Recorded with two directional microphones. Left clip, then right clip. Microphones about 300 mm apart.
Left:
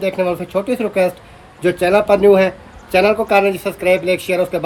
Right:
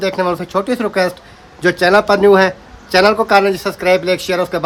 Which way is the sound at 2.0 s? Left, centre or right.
Centre.